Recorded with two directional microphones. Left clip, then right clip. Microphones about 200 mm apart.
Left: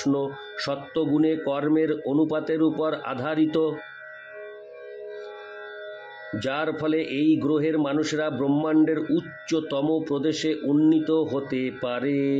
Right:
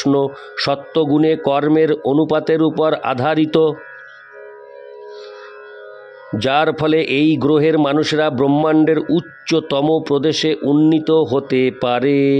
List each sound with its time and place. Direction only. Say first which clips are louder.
0.0 s a man's voice: right 9 dB; 50° right (ahead or behind)
6.3 s a man's voice: right 12 dB; 55° right (ahead or behind)